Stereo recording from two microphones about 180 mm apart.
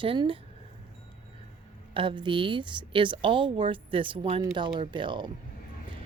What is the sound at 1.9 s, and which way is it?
A woman's voice, 30° right (ahead or behind).